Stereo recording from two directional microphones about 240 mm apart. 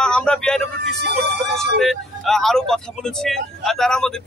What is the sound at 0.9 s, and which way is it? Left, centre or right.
Speech, right.